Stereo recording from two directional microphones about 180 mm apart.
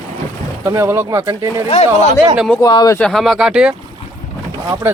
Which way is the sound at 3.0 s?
Centre (ahead or behind).